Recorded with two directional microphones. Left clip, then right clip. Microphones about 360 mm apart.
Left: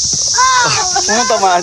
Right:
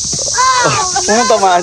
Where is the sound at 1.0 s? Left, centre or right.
Centre.